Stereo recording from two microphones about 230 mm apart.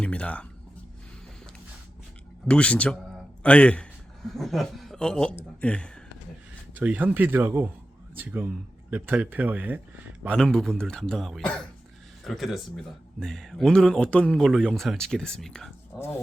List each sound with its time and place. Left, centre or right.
0.0 s a sound: centre
2.5 s a man's voice: centre
6.7 s speech: centre